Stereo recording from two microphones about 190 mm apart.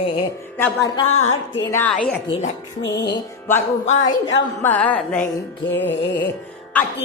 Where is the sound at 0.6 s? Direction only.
10° left (ahead or behind).